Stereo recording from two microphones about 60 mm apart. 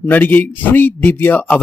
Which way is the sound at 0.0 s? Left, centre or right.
Left.